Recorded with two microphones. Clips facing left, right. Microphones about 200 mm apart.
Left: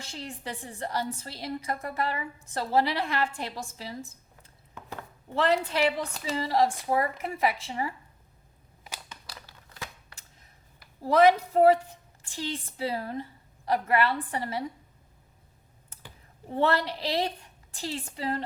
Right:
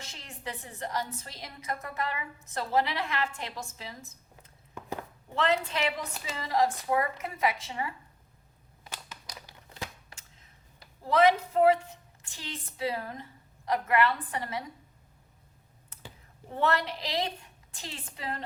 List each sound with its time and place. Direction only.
0.0 s a woman's voice: 35° left (ahead or behind)
5.3 s a woman's voice: 35° left (ahead or behind)
9.6 s a sound: 25° right (ahead or behind)
11.0 s a woman's voice: 40° left (ahead or behind)
16.6 s a woman's voice: 30° left (ahead or behind)